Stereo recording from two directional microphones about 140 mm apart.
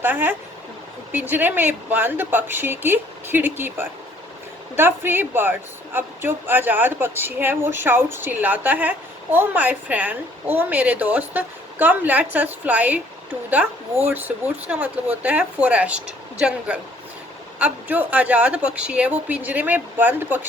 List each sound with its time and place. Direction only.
0.0 s a woman's voice: 15° right (ahead or behind)